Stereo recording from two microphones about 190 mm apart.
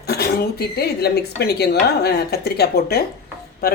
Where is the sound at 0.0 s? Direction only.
55° left (ahead or behind).